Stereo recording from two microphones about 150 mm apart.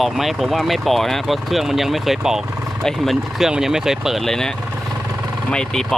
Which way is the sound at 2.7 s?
Centre (ahead or behind).